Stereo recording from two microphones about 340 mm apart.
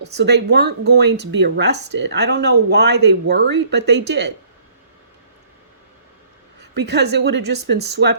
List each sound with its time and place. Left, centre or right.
0.2 s speech: right
6.6 s speech: right